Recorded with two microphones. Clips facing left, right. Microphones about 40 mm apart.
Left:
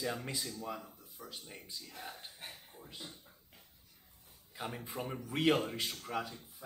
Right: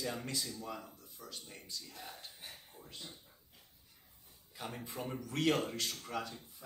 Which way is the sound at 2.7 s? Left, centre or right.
Centre.